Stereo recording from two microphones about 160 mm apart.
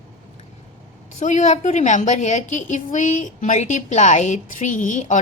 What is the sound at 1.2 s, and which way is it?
A woman's voice, 50° left (ahead or behind).